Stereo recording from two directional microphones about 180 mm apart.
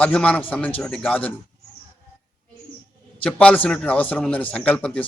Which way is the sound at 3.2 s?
5° left (ahead or behind).